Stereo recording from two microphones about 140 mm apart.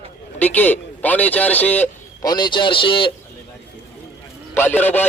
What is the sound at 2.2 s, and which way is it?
Speech, 30° left (ahead or behind).